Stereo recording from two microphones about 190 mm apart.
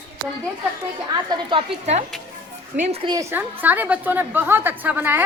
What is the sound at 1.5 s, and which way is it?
Speech, 35° right (ahead or behind).